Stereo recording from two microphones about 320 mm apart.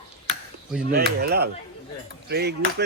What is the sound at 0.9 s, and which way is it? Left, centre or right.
Speech, right.